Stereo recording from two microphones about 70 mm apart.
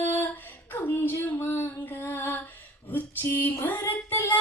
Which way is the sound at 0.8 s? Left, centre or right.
Left.